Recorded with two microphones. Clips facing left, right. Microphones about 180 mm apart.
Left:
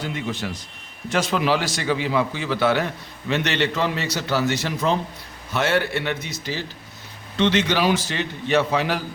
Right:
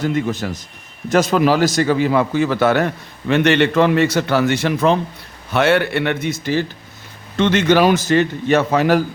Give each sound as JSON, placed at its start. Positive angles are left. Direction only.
{"t": 0.0, "sound": "a man's voice", "side_deg": -45}